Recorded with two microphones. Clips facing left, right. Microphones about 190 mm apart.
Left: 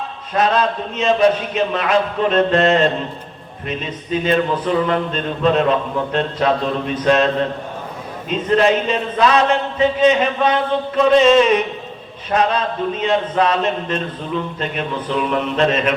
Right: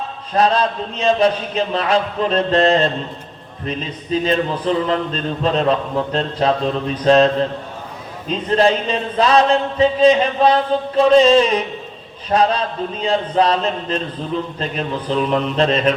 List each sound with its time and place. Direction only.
0.3 s speech: 35° right (ahead or behind)
8.4 s speech: 35° right (ahead or behind)